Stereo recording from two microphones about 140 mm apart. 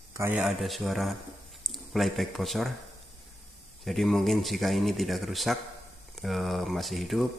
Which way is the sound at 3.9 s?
Centre (ahead or behind).